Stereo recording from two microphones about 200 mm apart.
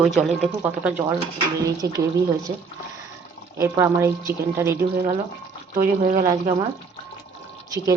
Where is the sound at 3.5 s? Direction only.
15° right (ahead or behind).